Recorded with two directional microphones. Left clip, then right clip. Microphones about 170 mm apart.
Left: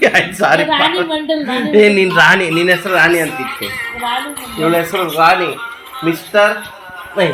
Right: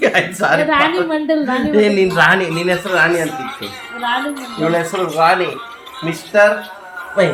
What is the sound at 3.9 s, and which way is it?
Music, 5° right (ahead or behind).